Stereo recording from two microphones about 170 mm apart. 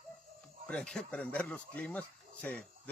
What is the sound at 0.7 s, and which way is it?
Speech, 5° left (ahead or behind).